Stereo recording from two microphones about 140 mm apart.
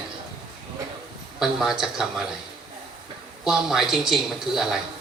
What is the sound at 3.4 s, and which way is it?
A woman's voice, 5° right (ahead or behind).